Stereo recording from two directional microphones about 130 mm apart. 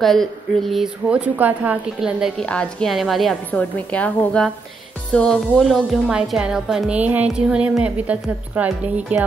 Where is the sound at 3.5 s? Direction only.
10° left (ahead or behind).